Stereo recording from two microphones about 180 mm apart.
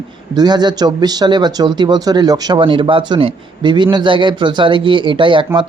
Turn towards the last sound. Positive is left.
turn(degrees=-25)  # may be behind; listen again after turning